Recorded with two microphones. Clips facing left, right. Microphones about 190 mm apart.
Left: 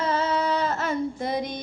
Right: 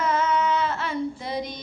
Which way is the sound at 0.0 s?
30° left (ahead or behind).